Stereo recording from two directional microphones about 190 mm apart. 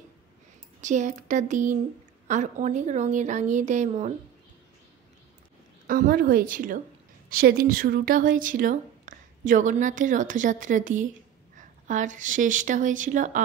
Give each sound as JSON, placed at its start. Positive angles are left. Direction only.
{"t": 0.7, "sound": "a woman's voice", "side_deg": -40}
{"t": 5.9, "sound": "a woman's voice", "side_deg": -50}